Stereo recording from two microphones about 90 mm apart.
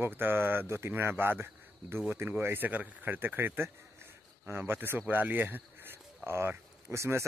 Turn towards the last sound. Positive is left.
turn(degrees=-30)  # may be behind; listen again after turning